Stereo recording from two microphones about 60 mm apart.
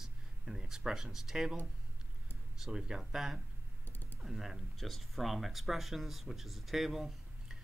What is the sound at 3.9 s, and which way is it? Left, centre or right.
Typing, left.